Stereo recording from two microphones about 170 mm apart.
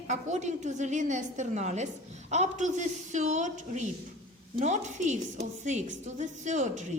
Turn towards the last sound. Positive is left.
turn(degrees=-45)  # may be behind; listen again after turning